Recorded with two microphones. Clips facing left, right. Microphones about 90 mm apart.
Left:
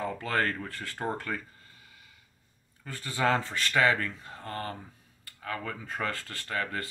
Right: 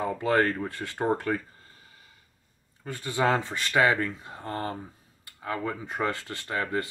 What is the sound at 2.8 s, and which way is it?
Speech, 20° right (ahead or behind).